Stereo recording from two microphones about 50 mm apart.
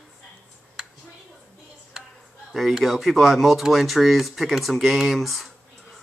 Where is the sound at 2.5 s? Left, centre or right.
Centre.